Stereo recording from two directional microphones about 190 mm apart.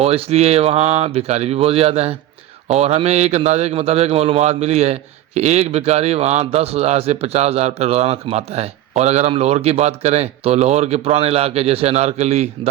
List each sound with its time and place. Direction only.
0.0 s a man's voice: 35° right (ahead or behind)